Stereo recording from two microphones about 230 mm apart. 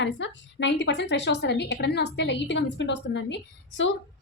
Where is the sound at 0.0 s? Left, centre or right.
Left.